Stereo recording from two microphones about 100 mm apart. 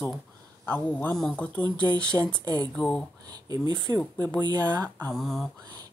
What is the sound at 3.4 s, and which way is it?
Speech, 40° right (ahead or behind).